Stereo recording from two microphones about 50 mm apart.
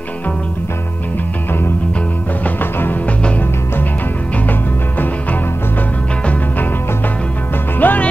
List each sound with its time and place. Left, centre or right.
2.4 s music: left
7.8 s music: left